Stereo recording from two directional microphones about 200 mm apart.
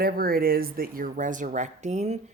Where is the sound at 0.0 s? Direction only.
50° right (ahead or behind).